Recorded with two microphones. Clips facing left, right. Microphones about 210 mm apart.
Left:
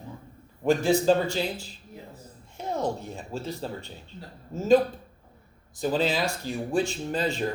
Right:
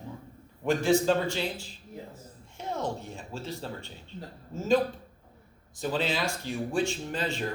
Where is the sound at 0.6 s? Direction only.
35° left (ahead or behind).